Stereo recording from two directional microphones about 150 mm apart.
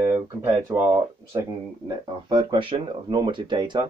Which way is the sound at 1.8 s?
30° right (ahead or behind).